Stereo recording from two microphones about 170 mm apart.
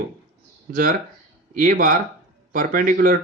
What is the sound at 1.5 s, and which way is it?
Speech, 55° right (ahead or behind).